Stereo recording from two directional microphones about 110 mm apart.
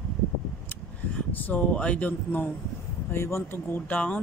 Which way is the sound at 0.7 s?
15° left (ahead or behind).